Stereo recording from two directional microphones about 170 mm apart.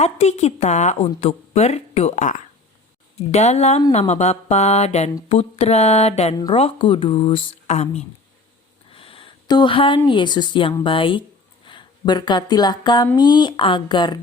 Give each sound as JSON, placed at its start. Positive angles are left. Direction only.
{"t": 0.0, "sound": "a woman's voice", "side_deg": 40}
{"t": 8.9, "sound": "a sound", "side_deg": 35}
{"t": 10.1, "sound": "speech", "side_deg": 25}